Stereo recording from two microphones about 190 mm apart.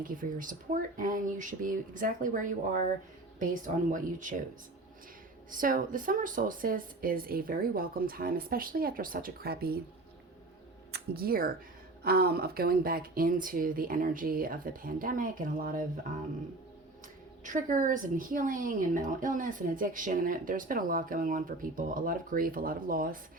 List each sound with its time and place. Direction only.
0.0 s a woman's voice: 45° right (ahead or behind)
5.5 s a woman's voice: 45° right (ahead or behind)
10.9 s a woman's voice: 55° right (ahead or behind)
17.4 s a woman's voice: 45° right (ahead or behind)